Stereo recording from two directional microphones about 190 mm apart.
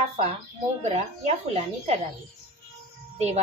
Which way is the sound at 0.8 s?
35° right (ahead or behind).